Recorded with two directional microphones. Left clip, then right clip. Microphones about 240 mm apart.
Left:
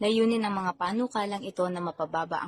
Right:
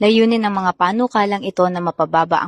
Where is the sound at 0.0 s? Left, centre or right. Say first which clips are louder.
Right 11 dB; right.